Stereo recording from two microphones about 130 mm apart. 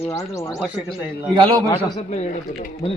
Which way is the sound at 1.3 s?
40° right (ahead or behind).